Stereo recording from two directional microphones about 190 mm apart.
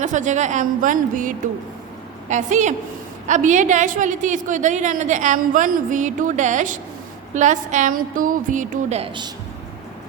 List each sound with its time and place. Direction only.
0.0 s a woman's voice: 40° right (ahead or behind)
2.3 s a woman's voice: 40° right (ahead or behind)